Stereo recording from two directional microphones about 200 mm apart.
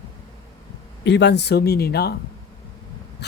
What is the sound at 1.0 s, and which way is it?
Speech, 60° left (ahead or behind).